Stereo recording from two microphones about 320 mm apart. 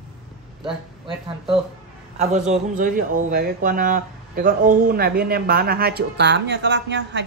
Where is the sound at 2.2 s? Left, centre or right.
Right.